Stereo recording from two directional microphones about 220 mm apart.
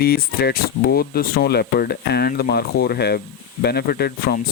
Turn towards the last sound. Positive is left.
turn(degrees=45)  # may be behind; listen again after turning